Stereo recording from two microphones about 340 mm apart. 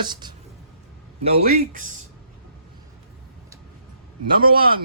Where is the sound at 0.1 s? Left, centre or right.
Centre.